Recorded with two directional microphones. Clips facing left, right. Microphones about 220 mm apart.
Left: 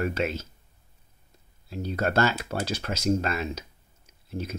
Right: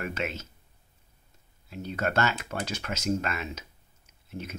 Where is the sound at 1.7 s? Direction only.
35° left (ahead or behind).